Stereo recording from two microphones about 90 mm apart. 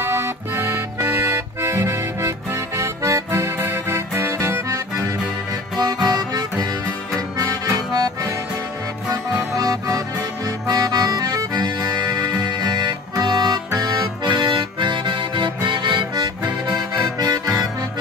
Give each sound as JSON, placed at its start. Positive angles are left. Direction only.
{"t": 0.0, "sound": "accordion", "side_deg": -30}
{"t": 5.8, "sound": "music", "side_deg": -50}
{"t": 7.2, "sound": "accordion", "side_deg": -45}
{"t": 9.6, "sound": "accordion", "side_deg": -40}
{"t": 12.3, "sound": "music", "side_deg": -50}
{"t": 16.6, "sound": "accordion", "side_deg": -50}